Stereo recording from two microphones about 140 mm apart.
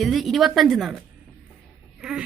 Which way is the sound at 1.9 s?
5° right (ahead or behind).